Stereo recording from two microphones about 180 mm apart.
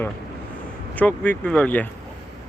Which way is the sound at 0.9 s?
10° left (ahead or behind).